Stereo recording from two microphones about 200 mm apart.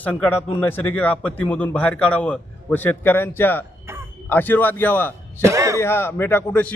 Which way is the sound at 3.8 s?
10° right (ahead or behind).